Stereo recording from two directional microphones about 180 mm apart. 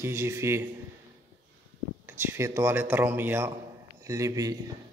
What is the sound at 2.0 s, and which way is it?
A man's voice, 15° right (ahead or behind).